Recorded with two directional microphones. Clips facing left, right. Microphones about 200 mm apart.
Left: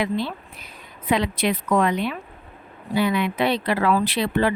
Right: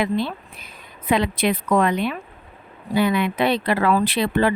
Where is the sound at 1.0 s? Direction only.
55° right (ahead or behind).